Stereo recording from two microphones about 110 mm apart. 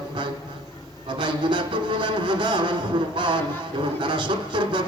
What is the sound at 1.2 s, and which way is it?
Speech, 45° right (ahead or behind).